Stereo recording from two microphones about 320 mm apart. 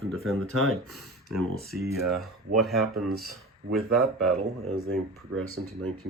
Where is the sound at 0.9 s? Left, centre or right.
Centre.